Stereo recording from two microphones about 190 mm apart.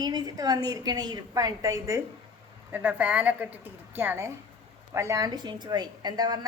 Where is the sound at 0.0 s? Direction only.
20° right (ahead or behind).